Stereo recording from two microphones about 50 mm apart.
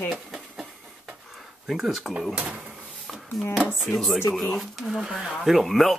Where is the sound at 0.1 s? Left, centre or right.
Centre.